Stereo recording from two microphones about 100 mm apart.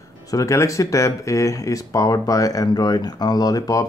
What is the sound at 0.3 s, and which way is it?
Speech, 35° left (ahead or behind).